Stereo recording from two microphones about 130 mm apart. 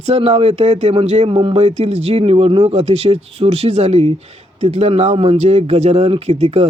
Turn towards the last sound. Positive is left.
turn(degrees=-55)  # may be behind; listen again after turning